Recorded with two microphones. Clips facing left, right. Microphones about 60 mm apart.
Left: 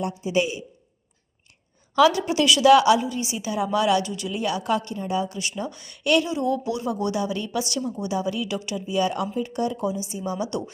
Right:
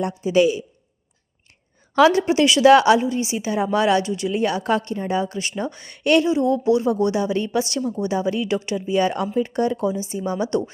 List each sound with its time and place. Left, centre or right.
0.0 s a man's voice: right
2.0 s speech: right
4.3 s speech: right
6.2 s speech: right